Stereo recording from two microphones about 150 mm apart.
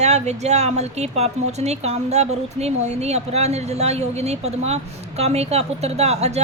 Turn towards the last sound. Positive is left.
turn(degrees=-45)  # may be behind; listen again after turning